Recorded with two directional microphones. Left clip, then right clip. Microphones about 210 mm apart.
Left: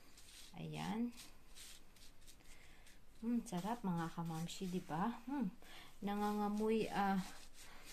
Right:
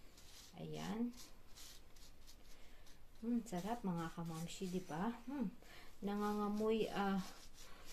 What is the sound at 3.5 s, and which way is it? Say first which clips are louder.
Speech: left 1 dB; 45° left (ahead or behind).